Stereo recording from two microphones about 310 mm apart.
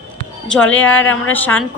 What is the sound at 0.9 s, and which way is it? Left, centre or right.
Speech, left.